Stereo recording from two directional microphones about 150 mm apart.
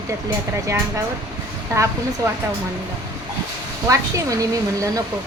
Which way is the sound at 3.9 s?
20° right (ahead or behind).